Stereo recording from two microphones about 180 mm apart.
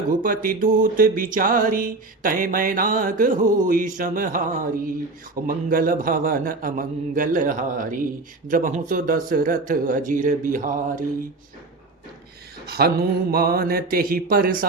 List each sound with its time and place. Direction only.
0.1 s music: 50° right (ahead or behind)
12.6 s mantra: 60° right (ahead or behind)